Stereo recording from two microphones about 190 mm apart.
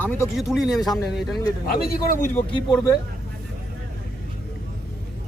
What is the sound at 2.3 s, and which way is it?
Speech, 10° left (ahead or behind).